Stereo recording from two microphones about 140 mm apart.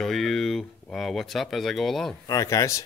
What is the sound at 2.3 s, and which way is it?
Speech, 25° left (ahead or behind).